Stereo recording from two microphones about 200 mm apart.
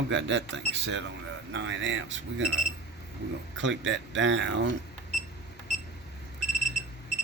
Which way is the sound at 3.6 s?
65° right (ahead or behind).